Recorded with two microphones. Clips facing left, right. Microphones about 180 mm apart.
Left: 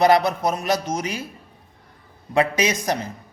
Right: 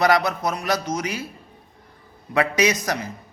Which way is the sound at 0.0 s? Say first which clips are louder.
Left 3 dB; 25° left (ahead or behind).